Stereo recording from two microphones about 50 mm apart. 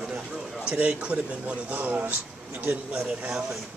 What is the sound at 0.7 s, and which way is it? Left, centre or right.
Speech, right.